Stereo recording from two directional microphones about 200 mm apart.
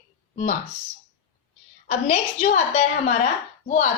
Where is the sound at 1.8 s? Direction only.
35° left (ahead or behind).